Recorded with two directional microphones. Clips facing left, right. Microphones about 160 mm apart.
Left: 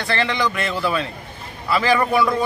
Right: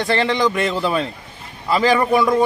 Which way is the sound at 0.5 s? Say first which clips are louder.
Right 3 dB; 30° right (ahead or behind).